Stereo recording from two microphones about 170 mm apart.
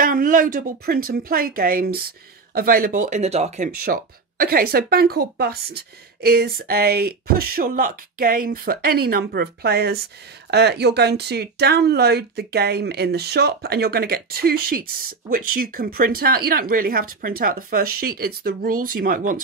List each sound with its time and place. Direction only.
0.0 s speech: 55° right (ahead or behind)
3.8 s speech: 60° right (ahead or behind)